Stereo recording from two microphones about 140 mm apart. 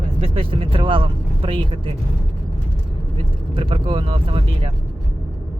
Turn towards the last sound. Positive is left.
turn(degrees=-45)  # may be behind; listen again after turning